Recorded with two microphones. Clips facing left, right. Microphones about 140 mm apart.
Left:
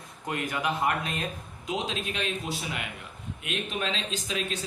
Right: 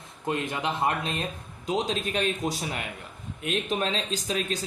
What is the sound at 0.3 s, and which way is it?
Speech, 25° right (ahead or behind).